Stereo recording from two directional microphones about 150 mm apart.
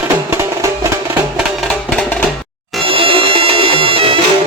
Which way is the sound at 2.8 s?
40° right (ahead or behind).